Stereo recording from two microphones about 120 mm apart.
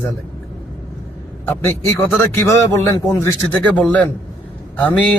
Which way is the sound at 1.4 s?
20° left (ahead or behind).